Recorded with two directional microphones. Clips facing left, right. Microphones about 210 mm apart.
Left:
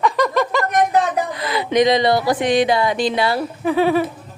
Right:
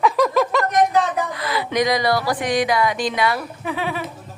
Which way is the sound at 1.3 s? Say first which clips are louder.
Left 3 dB; 20° left (ahead or behind).